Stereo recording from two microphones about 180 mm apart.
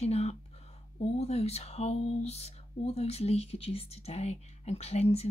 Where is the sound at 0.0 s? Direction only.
35° left (ahead or behind).